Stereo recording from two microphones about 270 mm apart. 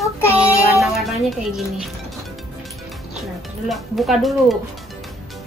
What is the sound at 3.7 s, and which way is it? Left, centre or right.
Speech, centre.